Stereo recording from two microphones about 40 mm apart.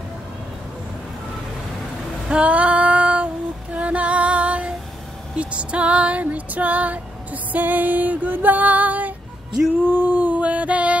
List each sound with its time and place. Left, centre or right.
2.2 s female singing: right
5.3 s music: right
9.8 s a sound: right